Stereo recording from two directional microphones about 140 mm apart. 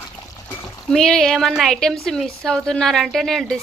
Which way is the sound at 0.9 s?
5° left (ahead or behind).